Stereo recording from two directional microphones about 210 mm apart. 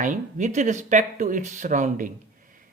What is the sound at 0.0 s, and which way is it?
Speech, 35° right (ahead or behind).